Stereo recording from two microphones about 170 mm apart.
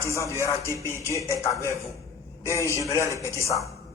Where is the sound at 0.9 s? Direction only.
15° left (ahead or behind).